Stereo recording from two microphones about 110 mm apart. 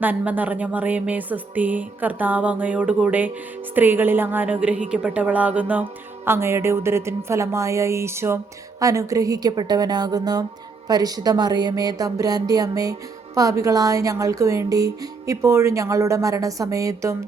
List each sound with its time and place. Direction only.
0.0 s music: 15° right (ahead or behind)
3.8 s a woman's voice: 20° right (ahead or behind)